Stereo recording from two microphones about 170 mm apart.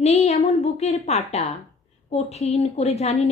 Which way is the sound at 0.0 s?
40° left (ahead or behind).